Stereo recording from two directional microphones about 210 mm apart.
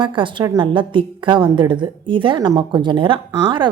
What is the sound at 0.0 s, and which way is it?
A woman's voice, 25° right (ahead or behind).